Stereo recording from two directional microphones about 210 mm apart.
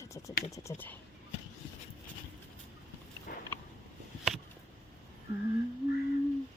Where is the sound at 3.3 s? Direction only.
45° left (ahead or behind).